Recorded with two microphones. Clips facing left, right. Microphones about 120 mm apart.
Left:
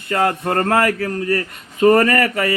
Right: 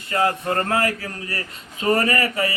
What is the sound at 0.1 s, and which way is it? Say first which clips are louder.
Speech: left 3 dB; 55° left (ahead or behind).